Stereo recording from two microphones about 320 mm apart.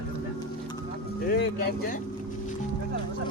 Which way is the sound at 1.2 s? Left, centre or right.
Left.